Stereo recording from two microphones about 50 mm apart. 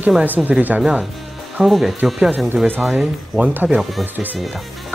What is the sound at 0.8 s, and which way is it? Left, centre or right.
Speech, centre.